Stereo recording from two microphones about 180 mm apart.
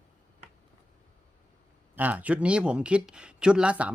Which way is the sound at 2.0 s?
10° right (ahead or behind).